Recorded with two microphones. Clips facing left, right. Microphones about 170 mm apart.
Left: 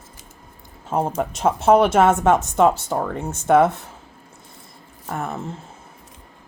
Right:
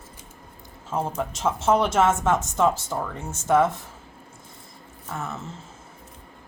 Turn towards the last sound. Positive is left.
turn(degrees=55)  # may be behind; listen again after turning